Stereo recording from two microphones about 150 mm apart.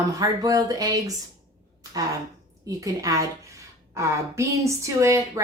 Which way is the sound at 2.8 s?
20° right (ahead or behind).